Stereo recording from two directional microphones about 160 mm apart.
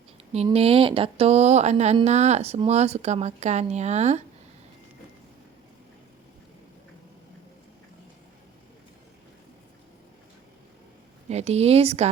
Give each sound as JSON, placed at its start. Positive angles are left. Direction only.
{"t": 0.5, "sound": "speech", "side_deg": -40}
{"t": 11.3, "sound": "speech", "side_deg": -40}